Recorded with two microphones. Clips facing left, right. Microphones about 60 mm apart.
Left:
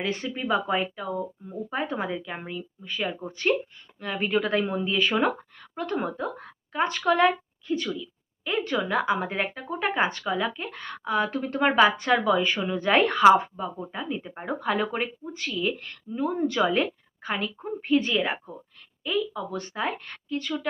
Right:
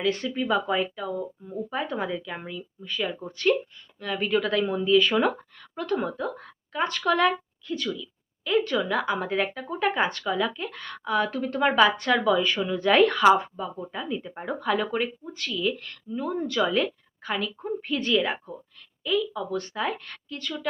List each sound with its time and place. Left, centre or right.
0.0 s speech: centre